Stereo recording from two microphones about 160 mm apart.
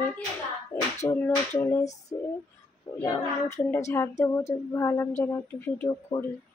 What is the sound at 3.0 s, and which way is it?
Speech, 15° left (ahead or behind).